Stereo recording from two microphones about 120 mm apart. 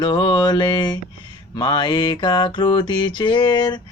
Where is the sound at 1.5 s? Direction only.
40° left (ahead or behind).